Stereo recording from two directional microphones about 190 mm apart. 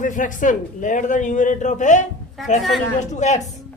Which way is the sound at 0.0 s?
45° left (ahead or behind).